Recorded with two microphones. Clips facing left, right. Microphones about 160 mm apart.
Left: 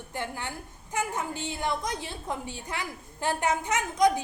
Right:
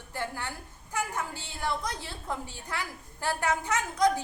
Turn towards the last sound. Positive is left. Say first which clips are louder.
# left 2 dB
turn(degrees=20)  # may be behind; listen again after turning